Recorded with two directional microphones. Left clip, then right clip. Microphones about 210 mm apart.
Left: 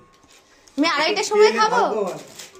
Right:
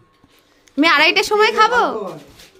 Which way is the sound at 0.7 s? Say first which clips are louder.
Right 7 dB; 70° right (ahead or behind).